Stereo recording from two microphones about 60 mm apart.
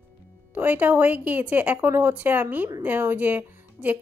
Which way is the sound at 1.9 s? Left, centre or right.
Right.